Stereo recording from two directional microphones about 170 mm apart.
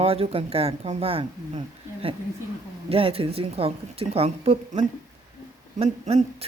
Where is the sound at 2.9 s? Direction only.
35° right (ahead or behind).